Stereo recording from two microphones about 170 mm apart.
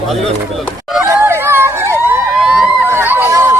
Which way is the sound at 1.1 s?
15° right (ahead or behind).